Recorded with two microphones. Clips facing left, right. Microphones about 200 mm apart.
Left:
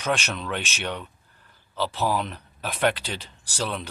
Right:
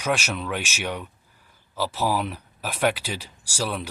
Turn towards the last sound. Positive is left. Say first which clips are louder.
# right 1 dB
turn(degrees=-10)  # may be behind; listen again after turning